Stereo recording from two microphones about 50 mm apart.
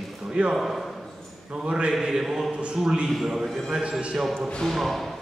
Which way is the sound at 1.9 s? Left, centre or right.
Centre.